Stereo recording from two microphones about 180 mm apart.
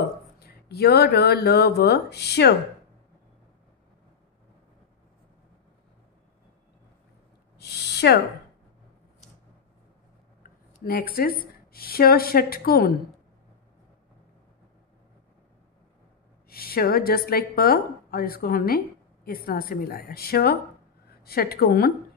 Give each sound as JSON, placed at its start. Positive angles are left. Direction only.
{"t": 0.4, "sound": "speech", "side_deg": 60}
{"t": 7.5, "sound": "owl", "side_deg": 65}
{"t": 10.4, "sound": "speech", "side_deg": 55}
{"t": 16.4, "sound": "a sound", "side_deg": 55}
{"t": 17.3, "sound": "a woman's voice", "side_deg": 55}